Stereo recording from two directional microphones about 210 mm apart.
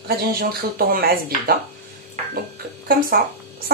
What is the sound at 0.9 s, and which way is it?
Speech, 45° right (ahead or behind).